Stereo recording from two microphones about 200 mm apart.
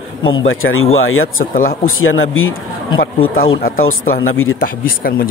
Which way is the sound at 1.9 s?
90° left.